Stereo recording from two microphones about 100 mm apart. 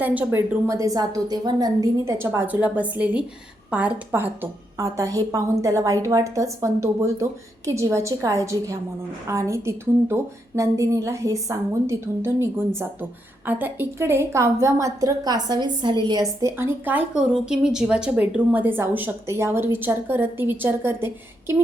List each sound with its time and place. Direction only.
0.0 s a woman's voice: 15° right (ahead or behind)
0.3 s a woman's voice: 30° right (ahead or behind)
2.1 s a woman's voice: 25° right (ahead or behind)
4.8 s a woman's voice: 35° right (ahead or behind); by 16.0 s 50° right (ahead or behind)
16.0 s a woman's voice: 35° right (ahead or behind); by 17.2 s 15° right (ahead or behind)
17.3 s a woman's voice: 5° right (ahead or behind); by 21.5 s 25° right (ahead or behind)